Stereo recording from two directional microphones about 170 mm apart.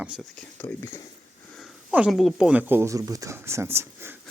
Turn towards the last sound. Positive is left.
turn(degrees=-15)  # may be behind; listen again after turning